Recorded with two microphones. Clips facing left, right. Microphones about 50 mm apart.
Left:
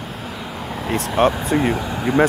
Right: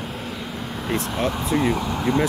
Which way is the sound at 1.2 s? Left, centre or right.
Left.